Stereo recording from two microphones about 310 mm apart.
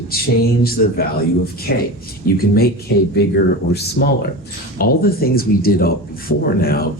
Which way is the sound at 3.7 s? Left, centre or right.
Left.